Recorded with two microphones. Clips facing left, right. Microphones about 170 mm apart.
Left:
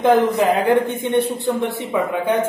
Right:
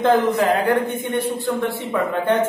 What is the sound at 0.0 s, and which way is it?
A man's voice, 15° left (ahead or behind).